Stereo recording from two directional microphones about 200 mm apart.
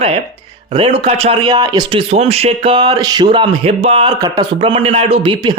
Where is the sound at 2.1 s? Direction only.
30° right (ahead or behind).